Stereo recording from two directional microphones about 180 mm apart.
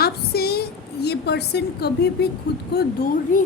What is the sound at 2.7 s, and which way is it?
Speech, 50° left (ahead or behind).